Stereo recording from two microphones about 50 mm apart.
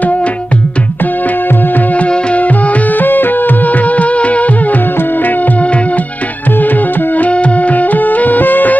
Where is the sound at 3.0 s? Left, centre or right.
Left.